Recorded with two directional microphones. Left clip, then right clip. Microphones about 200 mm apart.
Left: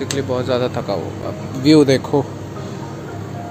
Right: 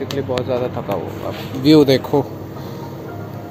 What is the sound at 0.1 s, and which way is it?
Speech, 25° left (ahead or behind).